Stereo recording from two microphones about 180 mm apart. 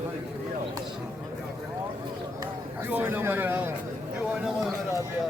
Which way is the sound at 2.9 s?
10° right (ahead or behind).